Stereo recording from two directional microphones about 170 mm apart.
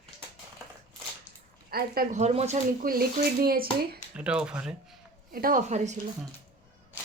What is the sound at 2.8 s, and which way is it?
Speech, 60° right (ahead or behind).